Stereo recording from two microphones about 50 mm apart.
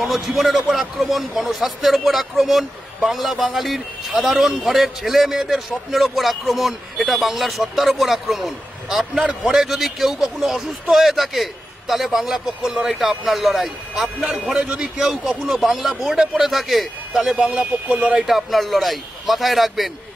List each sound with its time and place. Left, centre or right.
0.0 s a man's voice: centre
8.9 s speech: centre
9.4 s a man's voice: centre
14.5 s a man's voice: right; by 17.5 s centre
17.6 s speech: right
18.2 s a man's voice: centre